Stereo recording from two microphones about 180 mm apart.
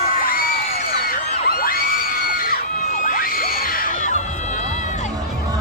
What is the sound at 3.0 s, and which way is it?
Music, 50° left (ahead or behind).